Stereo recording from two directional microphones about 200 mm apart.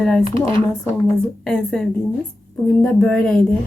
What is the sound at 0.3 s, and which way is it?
Speech, 25° right (ahead or behind).